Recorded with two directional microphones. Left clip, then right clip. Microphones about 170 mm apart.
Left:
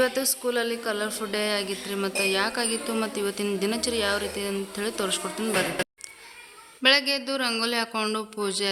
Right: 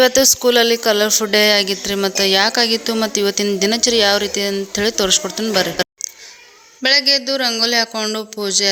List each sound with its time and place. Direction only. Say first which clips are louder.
0.0 s a woman's voice: right 13 dB; 45° right (ahead or behind); by 8.7 s 25° right (ahead or behind)